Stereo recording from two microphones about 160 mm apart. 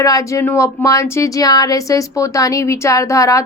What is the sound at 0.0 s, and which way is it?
Speech, 20° left (ahead or behind).